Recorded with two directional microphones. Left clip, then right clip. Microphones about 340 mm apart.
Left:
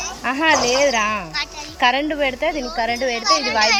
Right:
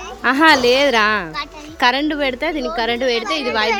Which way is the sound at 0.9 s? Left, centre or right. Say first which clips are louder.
Right 4 dB; centre.